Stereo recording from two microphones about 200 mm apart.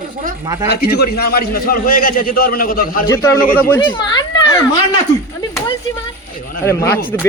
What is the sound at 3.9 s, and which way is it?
Speech, 20° left (ahead or behind).